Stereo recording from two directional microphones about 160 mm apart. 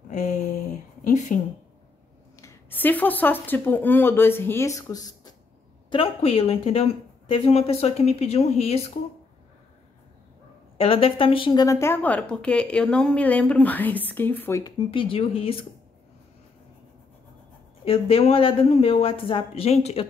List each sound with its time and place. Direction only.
0.1 s a sound: 50° left (ahead or behind)
1.0 s a woman's voice: 50° left (ahead or behind)
2.4 s a woman's voice: 10° left (ahead or behind)
5.9 s speech: 35° left (ahead or behind)
10.8 s a woman's voice: 35° left (ahead or behind); by 14.6 s 10° left (ahead or behind)
14.6 s speech: 35° left (ahead or behind)
17.8 s speech: 35° left (ahead or behind)